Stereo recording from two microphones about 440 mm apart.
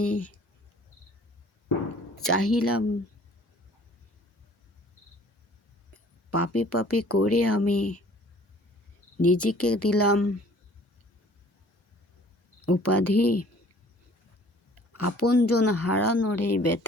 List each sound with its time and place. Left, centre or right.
0.0 s speech: left
2.2 s speech: left
6.3 s speech: left
9.2 s speech: left
12.6 s speech: left
14.8 s speech: left